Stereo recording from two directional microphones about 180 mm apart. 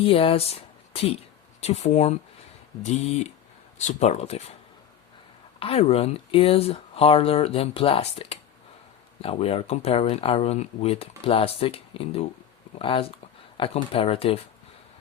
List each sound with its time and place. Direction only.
0.0 s speech: 30° left (ahead or behind)
5.5 s speech: 35° left (ahead or behind)